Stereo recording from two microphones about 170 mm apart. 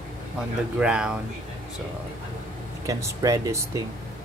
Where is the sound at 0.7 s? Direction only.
5° right (ahead or behind).